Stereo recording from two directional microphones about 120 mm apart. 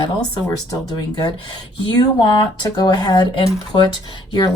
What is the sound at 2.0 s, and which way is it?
A woman's voice, 40° left (ahead or behind).